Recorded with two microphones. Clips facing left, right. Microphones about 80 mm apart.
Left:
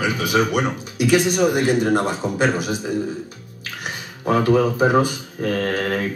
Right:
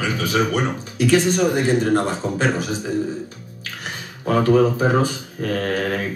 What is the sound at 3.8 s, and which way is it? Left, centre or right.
Speech, centre.